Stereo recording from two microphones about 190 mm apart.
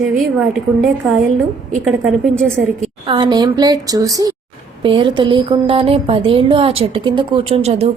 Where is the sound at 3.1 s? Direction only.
25° right (ahead or behind).